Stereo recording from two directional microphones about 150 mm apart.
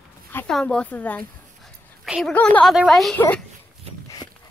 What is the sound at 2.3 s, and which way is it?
A woman's voice, 10° left (ahead or behind).